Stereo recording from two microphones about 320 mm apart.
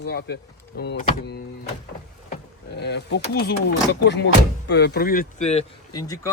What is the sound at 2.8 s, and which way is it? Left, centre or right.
Speech, left.